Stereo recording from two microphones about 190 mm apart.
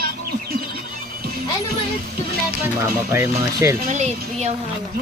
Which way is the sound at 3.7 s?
35° right (ahead or behind).